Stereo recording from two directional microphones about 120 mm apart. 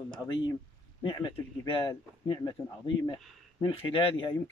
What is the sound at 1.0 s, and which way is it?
Speech, 30° left (ahead or behind).